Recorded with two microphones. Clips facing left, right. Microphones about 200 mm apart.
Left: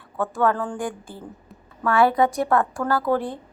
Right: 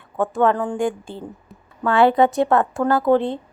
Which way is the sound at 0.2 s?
20° right (ahead or behind).